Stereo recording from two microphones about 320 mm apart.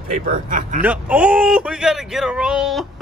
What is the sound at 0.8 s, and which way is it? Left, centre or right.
Speech, centre.